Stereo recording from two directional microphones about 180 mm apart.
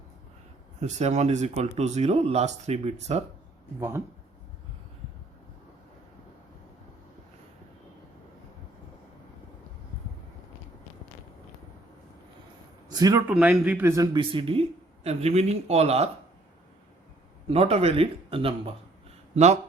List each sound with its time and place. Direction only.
0.8 s a man's voice: 40° right (ahead or behind)
3.8 s speech: 15° right (ahead or behind)
12.9 s speech: 20° right (ahead or behind)
13.2 s a man's voice: 5° right (ahead or behind); by 16.0 s 35° right (ahead or behind)
17.5 s a man's voice: 35° right (ahead or behind)